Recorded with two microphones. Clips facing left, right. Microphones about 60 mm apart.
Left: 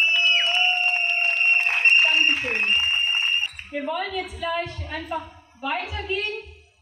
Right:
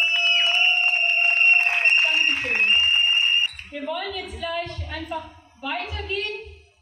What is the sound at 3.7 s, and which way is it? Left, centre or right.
A woman's voice, centre.